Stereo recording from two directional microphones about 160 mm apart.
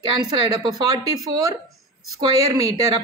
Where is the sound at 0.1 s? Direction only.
25° right (ahead or behind).